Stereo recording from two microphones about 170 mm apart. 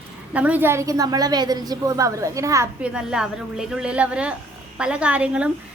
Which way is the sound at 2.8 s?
5° right (ahead or behind).